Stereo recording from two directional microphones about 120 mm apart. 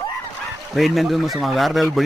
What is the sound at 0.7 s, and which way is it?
Speech, centre (ahead or behind).